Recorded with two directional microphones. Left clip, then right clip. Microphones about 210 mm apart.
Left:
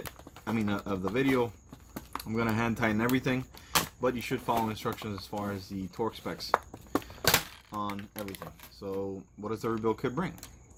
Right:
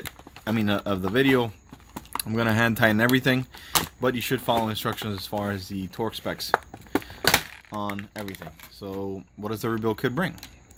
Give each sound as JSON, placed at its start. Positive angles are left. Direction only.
{"t": 0.4, "sound": "speech", "side_deg": -45}
{"t": 1.9, "sound": "a sound", "side_deg": -15}
{"t": 2.2, "sound": "speech", "side_deg": -50}
{"t": 7.7, "sound": "speech", "side_deg": -45}